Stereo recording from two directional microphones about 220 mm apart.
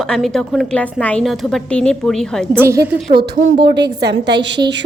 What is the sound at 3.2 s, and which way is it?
Speech, 50° right (ahead or behind).